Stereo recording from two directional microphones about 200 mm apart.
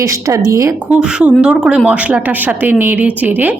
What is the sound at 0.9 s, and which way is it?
A woman's voice, 5° right (ahead or behind).